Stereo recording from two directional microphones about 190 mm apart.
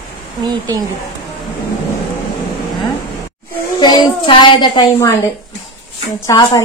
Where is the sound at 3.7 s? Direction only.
25° left (ahead or behind).